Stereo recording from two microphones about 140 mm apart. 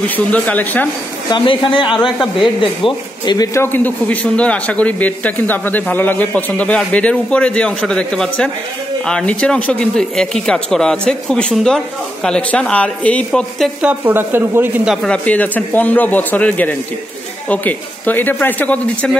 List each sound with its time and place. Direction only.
0.1 s a man's voice: 10° left (ahead or behind)
1.3 s a man's voice: 40° left (ahead or behind)
2.0 s speech: centre (ahead or behind)
2.6 s a man's voice: 35° left (ahead or behind)
3.5 s a man's voice: 15° left (ahead or behind)
13.7 s speech: 10° right (ahead or behind)
15.0 s a man's voice: 10° left (ahead or behind)